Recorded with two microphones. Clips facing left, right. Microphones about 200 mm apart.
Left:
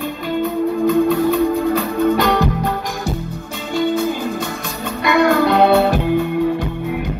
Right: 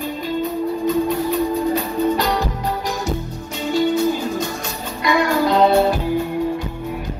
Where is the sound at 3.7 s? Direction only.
55° left (ahead or behind).